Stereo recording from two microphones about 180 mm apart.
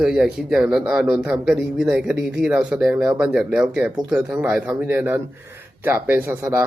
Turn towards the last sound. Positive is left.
turn(degrees=-15)  # may be behind; listen again after turning